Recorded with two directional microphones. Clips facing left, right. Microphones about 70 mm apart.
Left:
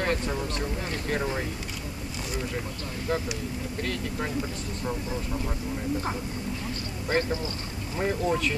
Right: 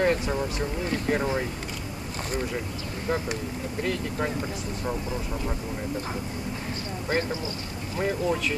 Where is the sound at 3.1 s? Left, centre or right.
Centre.